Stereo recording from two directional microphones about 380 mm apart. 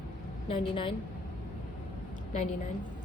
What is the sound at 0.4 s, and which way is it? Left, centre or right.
Speech, centre.